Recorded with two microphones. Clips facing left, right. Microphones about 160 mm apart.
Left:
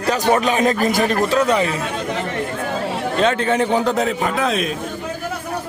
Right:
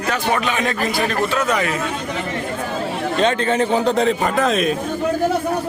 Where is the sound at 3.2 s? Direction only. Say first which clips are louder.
Even; 10° left (ahead or behind).